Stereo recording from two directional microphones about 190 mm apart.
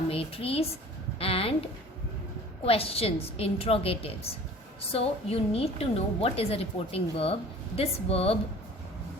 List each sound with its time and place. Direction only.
0.1 s a woman's voice: 30° left (ahead or behind)
2.6 s a woman's voice: 30° left (ahead or behind)